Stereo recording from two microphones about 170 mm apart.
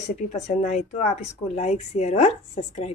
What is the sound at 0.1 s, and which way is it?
Speech, 40° left (ahead or behind).